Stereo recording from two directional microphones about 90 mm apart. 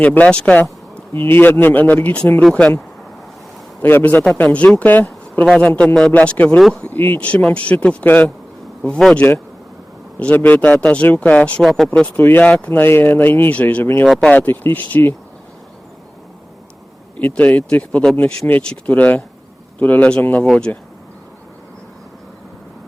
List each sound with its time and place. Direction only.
0.0 s speech: 15° left (ahead or behind)
1.1 s a man's voice: 25° left (ahead or behind)
11.6 s speech: centre (ahead or behind); by 14.1 s 20° left (ahead or behind)
14.1 s speech: 10° left (ahead or behind)
14.3 s speech: 20° left (ahead or behind)
17.2 s speech: 15° left (ahead or behind)